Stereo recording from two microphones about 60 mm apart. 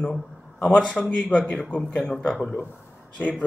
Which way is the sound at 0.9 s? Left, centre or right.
Left.